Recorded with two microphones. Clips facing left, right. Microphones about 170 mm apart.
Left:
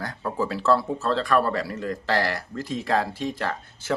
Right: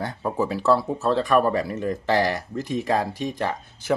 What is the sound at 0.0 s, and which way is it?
Speech, 20° right (ahead or behind).